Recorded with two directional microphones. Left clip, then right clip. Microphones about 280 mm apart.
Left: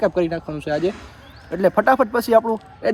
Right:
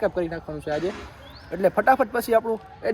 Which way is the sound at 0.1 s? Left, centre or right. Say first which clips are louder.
Left 6 dB; left.